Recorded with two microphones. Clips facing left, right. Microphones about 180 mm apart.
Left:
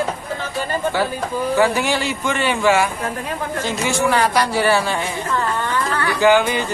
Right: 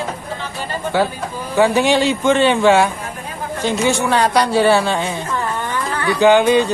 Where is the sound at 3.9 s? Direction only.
15° right (ahead or behind).